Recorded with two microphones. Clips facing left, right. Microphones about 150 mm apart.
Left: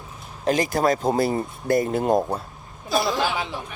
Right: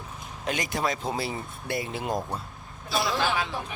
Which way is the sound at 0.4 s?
35° left (ahead or behind).